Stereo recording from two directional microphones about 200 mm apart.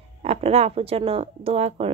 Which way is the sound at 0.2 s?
30° right (ahead or behind).